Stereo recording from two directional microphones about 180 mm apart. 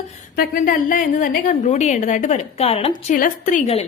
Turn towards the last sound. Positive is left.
turn(degrees=50)  # may be behind; listen again after turning